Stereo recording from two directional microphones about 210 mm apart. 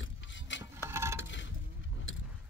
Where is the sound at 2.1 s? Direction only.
65° left (ahead or behind).